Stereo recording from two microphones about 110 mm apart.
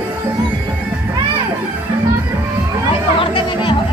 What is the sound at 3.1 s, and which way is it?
Speech, 50° left (ahead or behind).